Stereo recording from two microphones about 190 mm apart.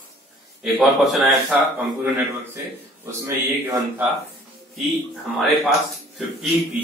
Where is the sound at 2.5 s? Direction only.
15° right (ahead or behind).